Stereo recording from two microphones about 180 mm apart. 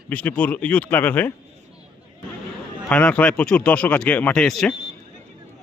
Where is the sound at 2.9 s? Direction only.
10° left (ahead or behind).